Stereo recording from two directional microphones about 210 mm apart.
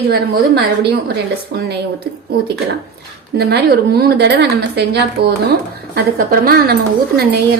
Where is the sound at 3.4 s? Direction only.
50° right (ahead or behind).